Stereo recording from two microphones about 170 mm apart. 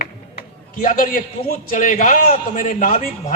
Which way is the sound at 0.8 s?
55° left (ahead or behind).